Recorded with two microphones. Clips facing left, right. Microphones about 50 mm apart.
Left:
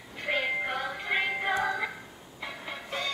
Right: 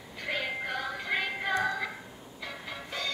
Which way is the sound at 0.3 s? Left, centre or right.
Left.